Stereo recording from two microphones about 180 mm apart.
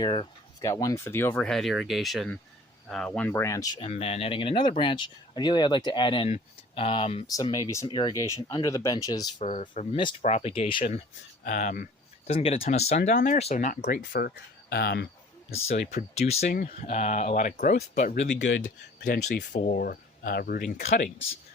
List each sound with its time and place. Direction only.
0.0 s speech: 25° left (ahead or behind)
3.8 s speech: 35° left (ahead or behind)
7.3 s speech: 20° left (ahead or behind)
9.4 s speech: 40° left (ahead or behind)
11.4 s speech: 50° left (ahead or behind)
12.3 s speech: 30° left (ahead or behind)
13.8 s speech: 55° left (ahead or behind)
15.4 s speech: 35° left (ahead or behind)
16.5 s speech: 50° left (ahead or behind)
16.8 s speech: 40° left (ahead or behind); by 20.8 s 55° left (ahead or behind)
20.8 s speech: 40° left (ahead or behind)